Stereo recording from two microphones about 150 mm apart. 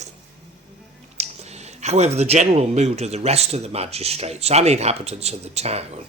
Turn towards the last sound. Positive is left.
turn(degrees=-45)  # may be behind; listen again after turning